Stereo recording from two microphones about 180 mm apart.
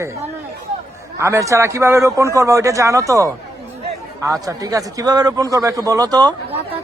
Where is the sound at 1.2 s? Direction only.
15° right (ahead or behind).